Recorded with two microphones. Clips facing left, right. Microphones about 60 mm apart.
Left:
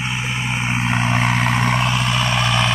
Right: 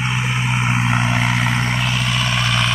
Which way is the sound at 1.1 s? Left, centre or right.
Left.